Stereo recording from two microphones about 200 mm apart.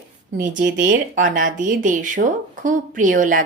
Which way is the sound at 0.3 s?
45° right (ahead or behind).